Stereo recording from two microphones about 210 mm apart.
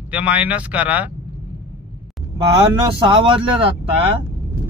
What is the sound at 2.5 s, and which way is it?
Speech, 20° right (ahead or behind).